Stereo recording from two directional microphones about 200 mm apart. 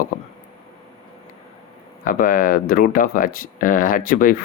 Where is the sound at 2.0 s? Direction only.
45° left (ahead or behind).